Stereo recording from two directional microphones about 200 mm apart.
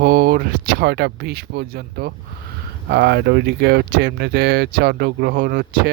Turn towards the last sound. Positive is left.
turn(degrees=-50)  # may be behind; listen again after turning